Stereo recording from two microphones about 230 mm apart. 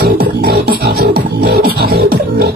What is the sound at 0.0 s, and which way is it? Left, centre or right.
Beatboxing, right.